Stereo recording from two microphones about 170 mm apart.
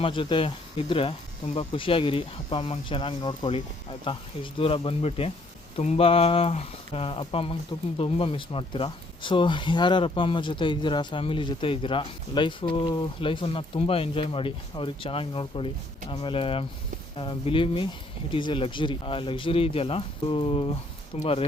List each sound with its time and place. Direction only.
0.0 s speech: 30° left (ahead or behind)